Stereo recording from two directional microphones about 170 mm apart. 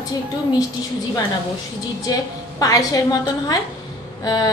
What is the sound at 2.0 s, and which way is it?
A woman's voice, 20° left (ahead or behind).